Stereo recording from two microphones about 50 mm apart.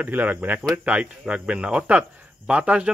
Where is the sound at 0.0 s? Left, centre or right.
Right.